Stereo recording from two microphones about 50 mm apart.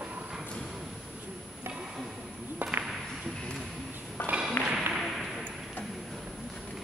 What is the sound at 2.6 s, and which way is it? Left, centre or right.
Whip, right.